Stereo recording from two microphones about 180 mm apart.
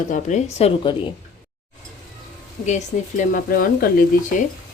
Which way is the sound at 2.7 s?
40° left (ahead or behind).